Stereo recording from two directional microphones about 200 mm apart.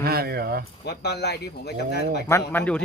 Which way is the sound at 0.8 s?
55° left (ahead or behind).